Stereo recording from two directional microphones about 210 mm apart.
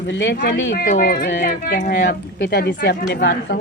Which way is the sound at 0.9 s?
45° left (ahead or behind).